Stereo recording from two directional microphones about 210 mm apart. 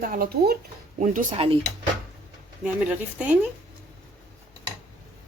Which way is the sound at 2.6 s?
5° right (ahead or behind).